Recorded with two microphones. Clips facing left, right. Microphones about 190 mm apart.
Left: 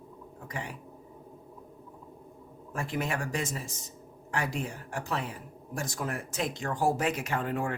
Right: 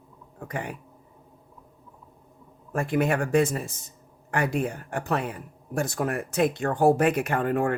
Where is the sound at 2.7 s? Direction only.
55° right (ahead or behind).